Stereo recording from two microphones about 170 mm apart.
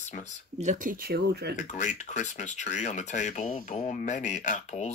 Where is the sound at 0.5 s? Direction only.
50° right (ahead or behind); by 1.6 s 70° right (ahead or behind).